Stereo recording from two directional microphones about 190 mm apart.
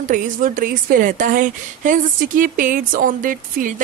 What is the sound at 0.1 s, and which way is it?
A woman's voice, 45° right (ahead or behind).